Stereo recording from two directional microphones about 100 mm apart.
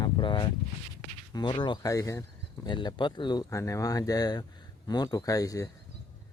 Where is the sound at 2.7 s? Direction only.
50° left (ahead or behind).